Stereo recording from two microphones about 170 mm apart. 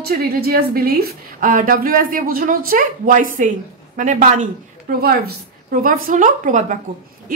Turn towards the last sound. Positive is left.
turn(degrees=-45)  # may be behind; listen again after turning